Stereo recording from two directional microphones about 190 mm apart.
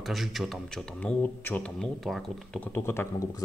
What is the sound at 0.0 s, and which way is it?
Speech, centre (ahead or behind).